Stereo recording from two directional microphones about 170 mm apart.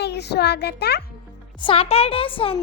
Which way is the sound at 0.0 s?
80° left.